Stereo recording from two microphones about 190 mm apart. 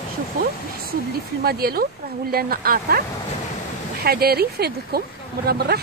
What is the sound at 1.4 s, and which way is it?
Speech, 55° right (ahead or behind).